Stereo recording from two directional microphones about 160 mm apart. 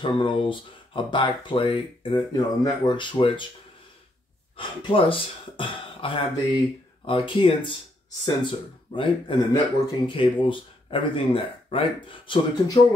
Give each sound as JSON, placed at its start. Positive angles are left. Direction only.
{"t": 0.0, "sound": "speech", "side_deg": 30}
{"t": 4.6, "sound": "speech", "side_deg": 35}